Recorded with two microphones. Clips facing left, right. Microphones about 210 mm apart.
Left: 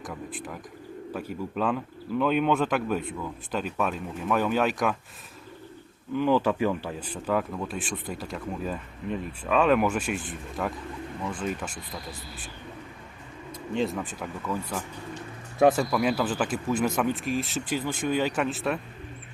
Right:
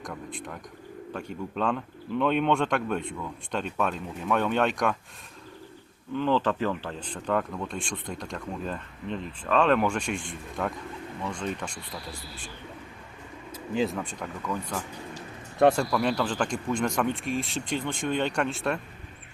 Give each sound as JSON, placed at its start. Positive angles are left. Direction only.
{"t": 0.0, "sound": "speech", "side_deg": 5}
{"t": 6.1, "sound": "speech", "side_deg": 10}
{"t": 13.5, "sound": "speech", "side_deg": 0}